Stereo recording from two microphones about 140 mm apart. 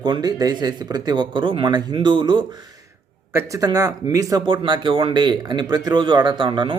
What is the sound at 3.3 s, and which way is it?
A man's voice, 25° right (ahead or behind).